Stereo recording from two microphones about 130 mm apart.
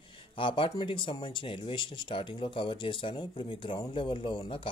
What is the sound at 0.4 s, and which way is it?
Speech, 40° left (ahead or behind).